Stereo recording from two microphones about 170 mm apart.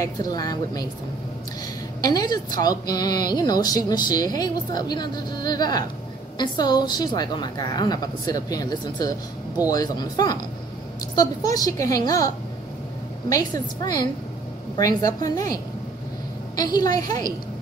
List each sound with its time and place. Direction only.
0.0 s a woman's voice: 20° left (ahead or behind)
2.0 s a woman's voice: 25° left (ahead or behind)
13.3 s a woman's voice: 20° left (ahead or behind)